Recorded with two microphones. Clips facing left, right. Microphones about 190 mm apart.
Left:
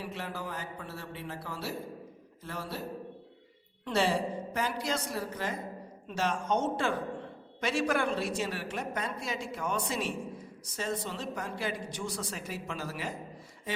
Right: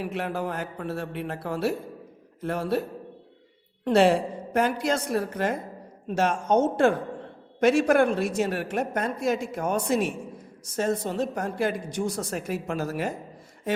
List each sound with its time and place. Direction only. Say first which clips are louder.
0.0 s a woman's voice: right 9 dB; 60° right (ahead or behind)
3.8 s a woman's voice: right 9 dB; 55° right (ahead or behind)